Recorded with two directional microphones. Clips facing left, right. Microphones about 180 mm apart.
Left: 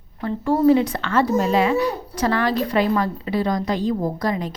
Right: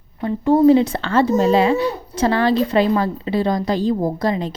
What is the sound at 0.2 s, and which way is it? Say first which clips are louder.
A child's voice: right 5 dB; 20° right (ahead or behind).